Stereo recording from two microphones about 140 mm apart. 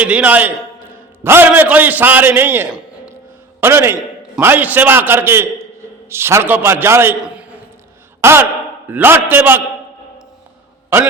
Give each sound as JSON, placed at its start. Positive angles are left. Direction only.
{"t": 0.0, "sound": "a man's voice", "side_deg": -10}